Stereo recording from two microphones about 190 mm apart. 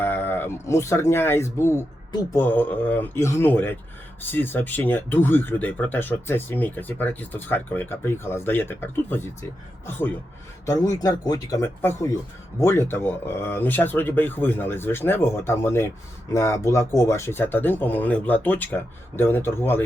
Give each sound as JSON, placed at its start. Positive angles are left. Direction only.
{"t": 0.0, "sound": "speech", "side_deg": 10}
{"t": 10.7, "sound": "speech", "side_deg": 20}